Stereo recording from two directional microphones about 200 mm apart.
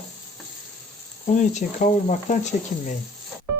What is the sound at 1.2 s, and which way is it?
Speech, 35° left (ahead or behind).